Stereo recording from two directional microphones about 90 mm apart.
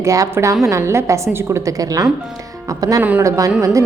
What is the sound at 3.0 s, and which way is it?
Speech, 15° right (ahead or behind).